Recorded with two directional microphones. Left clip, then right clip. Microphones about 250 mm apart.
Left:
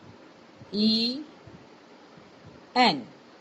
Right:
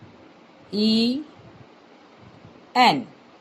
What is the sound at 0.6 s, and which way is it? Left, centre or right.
Speech, right.